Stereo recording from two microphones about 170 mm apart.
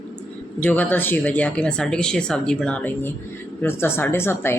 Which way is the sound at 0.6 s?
10° left (ahead or behind).